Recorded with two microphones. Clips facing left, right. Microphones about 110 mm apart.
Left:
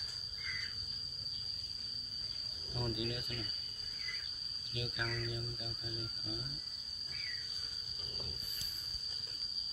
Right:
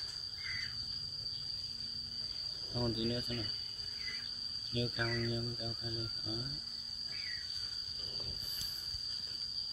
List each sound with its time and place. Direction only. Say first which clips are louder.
2.7 s speech: right 4 dB; 25° right (ahead or behind)
4.7 s speech: right 4 dB; 30° right (ahead or behind)